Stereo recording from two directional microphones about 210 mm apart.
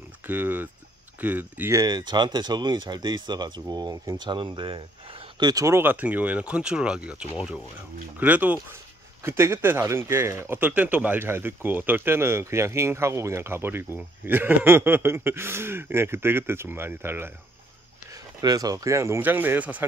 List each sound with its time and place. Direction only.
0.3 s speech: 10° right (ahead or behind)